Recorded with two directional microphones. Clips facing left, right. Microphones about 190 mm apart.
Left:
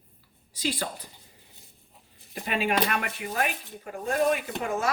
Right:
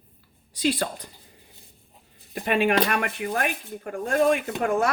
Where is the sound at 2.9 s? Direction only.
50° right (ahead or behind).